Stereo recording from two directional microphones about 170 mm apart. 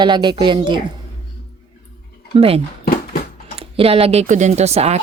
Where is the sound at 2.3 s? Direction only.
35° right (ahead or behind).